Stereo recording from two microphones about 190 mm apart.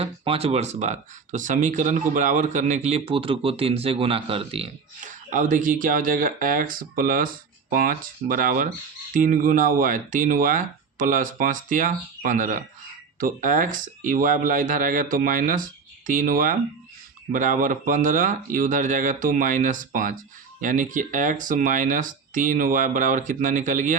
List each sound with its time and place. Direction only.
0.0 s speech: 30° right (ahead or behind)
5.0 s speech: 45° right (ahead or behind)